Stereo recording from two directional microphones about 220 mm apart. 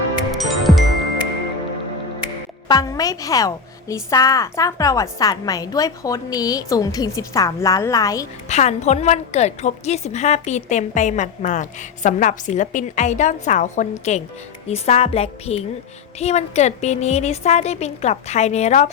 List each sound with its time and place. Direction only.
0.3 s music: centre (ahead or behind)
2.6 s a woman's voice: 15° left (ahead or behind)
8.4 s a woman's voice: 30° left (ahead or behind)